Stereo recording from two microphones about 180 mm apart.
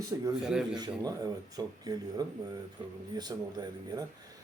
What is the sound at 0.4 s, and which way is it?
Speech, 5° right (ahead or behind).